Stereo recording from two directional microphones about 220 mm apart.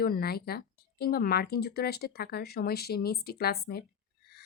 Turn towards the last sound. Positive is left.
turn(degrees=45)  # may be behind; listen again after turning